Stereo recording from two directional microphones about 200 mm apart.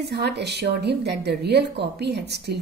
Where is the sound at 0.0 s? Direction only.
55° right (ahead or behind).